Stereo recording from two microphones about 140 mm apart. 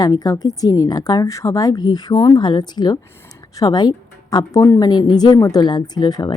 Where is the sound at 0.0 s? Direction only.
30° left (ahead or behind).